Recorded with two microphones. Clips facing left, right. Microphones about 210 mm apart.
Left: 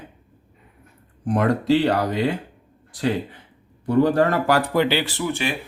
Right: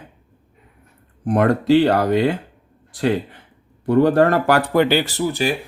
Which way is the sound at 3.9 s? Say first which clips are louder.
Right 3 dB; 60° right (ahead or behind).